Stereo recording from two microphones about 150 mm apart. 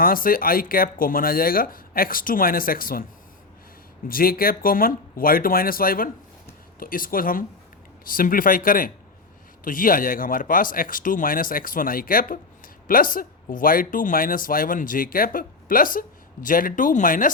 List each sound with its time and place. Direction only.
0.0 s speech: 70° left (ahead or behind)
4.1 s speech: 75° left (ahead or behind)